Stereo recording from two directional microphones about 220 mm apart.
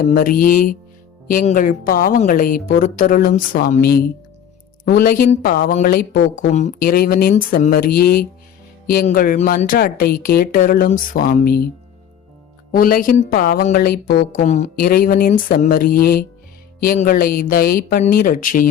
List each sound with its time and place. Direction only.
0.1 s a woman's voice: 40° left (ahead or behind)
12.7 s a woman's voice: 40° left (ahead or behind)
14.4 s a woman's voice: 30° left (ahead or behind)